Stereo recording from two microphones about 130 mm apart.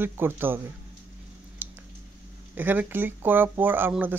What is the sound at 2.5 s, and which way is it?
Speech, 15° right (ahead or behind).